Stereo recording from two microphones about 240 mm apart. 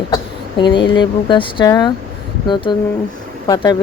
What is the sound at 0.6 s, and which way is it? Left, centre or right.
Speech, centre.